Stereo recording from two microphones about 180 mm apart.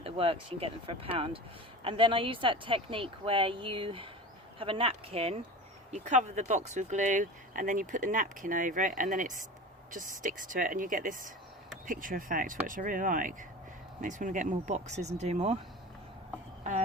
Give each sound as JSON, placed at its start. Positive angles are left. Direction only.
{"t": 0.0, "sound": "speech", "side_deg": -30}